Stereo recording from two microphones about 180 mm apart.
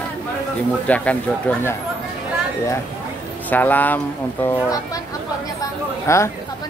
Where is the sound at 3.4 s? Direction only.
10° left (ahead or behind).